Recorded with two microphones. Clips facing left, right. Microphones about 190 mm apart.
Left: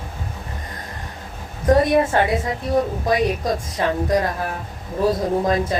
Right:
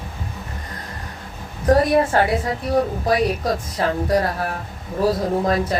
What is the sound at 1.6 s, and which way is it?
A woman's voice, 20° left (ahead or behind).